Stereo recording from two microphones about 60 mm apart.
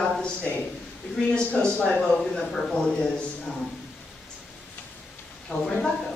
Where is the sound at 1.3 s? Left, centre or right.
Left.